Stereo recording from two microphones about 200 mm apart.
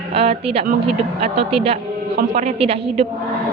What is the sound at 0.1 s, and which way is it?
A woman's voice, 30° right (ahead or behind).